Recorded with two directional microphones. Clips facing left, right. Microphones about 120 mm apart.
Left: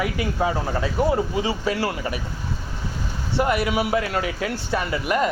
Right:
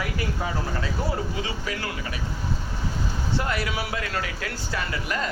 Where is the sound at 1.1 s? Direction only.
25° left (ahead or behind).